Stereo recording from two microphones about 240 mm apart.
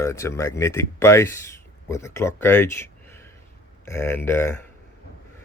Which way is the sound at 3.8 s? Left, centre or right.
Centre.